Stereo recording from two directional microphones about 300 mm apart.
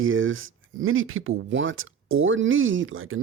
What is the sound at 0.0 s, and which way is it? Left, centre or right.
Speech, right.